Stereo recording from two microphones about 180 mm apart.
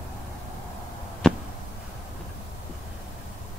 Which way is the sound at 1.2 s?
5° left (ahead or behind).